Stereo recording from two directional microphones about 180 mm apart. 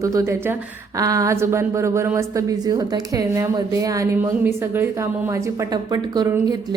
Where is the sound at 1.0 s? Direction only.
20° right (ahead or behind).